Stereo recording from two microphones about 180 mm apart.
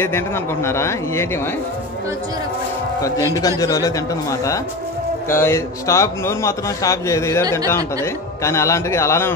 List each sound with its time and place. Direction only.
0.7 s a man's voice: 15° left (ahead or behind)
3.3 s a man's voice: 20° left (ahead or behind)